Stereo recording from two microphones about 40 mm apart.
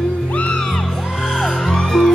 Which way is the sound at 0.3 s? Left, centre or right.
Left.